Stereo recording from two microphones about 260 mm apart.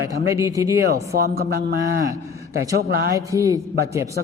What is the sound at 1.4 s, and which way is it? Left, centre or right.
Speech, right.